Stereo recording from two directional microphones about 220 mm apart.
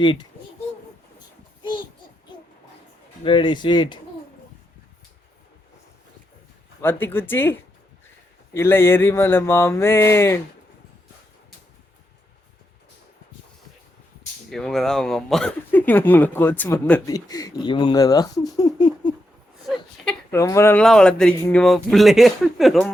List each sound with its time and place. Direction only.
0.0 s speech: 20° left (ahead or behind)
3.2 s speech: 20° left (ahead or behind)
6.8 s speech: 10° left (ahead or behind)
8.5 s speech: 10° left (ahead or behind)
14.5 s speech: centre (ahead or behind); by 19.1 s 15° left (ahead or behind)
20.3 s speech: 15° left (ahead or behind)